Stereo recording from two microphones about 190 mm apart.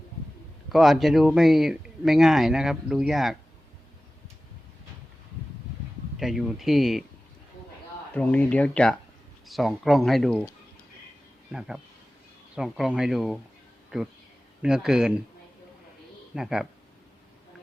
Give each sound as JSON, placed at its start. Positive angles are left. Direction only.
{"t": 0.7, "sound": "speech", "side_deg": 0}
{"t": 6.1, "sound": "speech", "side_deg": 0}
{"t": 8.1, "sound": "speech", "side_deg": 10}
{"t": 12.5, "sound": "speech", "side_deg": 0}
{"t": 14.6, "sound": "speech", "side_deg": -5}
{"t": 16.3, "sound": "speech", "side_deg": -5}